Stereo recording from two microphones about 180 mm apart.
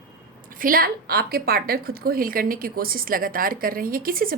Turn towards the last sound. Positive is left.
turn(degrees=-50)  # may be behind; listen again after turning